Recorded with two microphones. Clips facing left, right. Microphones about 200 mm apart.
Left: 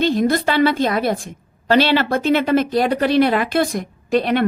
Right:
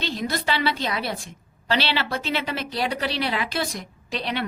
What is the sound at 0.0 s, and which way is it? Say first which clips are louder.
A woman's voice: left 11 dB; 50° left (ahead or behind).